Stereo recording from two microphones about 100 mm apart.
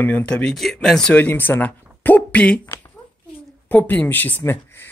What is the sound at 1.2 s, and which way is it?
Speech, 20° left (ahead or behind).